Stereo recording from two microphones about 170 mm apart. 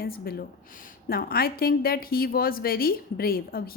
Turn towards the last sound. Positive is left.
turn(degrees=60)  # may be behind; listen again after turning